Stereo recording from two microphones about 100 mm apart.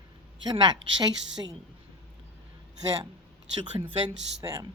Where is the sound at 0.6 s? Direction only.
50° right (ahead or behind).